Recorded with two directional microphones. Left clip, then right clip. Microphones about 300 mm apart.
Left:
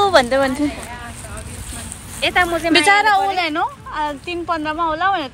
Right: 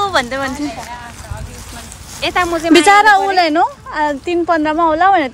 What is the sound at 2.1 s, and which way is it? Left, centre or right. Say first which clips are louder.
Speech: right 1 dB; right.